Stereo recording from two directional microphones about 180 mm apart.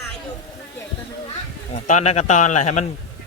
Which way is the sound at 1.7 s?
40° left (ahead or behind).